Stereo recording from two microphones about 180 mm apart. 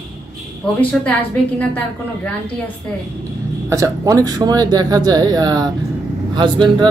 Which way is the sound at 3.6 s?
15° right (ahead or behind).